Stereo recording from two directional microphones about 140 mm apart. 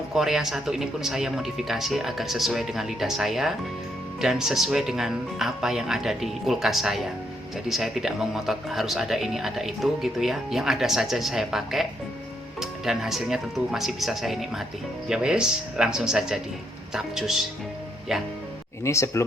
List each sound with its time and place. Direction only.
0.1 s speech: 5° right (ahead or behind)
18.8 s speech: 20° left (ahead or behind)